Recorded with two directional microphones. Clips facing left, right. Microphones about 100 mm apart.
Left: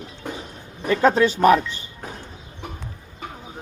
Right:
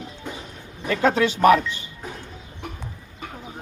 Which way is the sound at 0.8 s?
35° left (ahead or behind).